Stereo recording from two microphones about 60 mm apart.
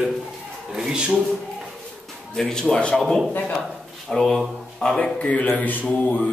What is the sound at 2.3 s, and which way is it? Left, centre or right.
Speech, centre.